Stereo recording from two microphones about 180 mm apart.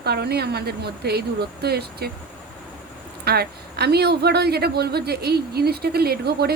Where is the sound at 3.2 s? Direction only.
60° right (ahead or behind).